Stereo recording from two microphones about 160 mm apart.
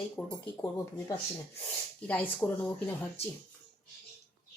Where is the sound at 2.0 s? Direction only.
10° left (ahead or behind).